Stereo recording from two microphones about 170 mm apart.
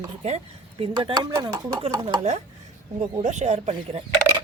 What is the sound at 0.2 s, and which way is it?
Speech, 40° right (ahead or behind).